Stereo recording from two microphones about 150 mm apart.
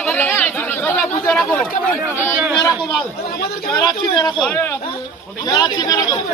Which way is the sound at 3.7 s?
25° left (ahead or behind).